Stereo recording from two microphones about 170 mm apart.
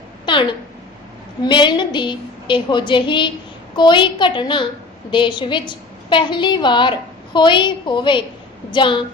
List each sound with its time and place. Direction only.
1.5 s a woman's voice: 30° left (ahead or behind)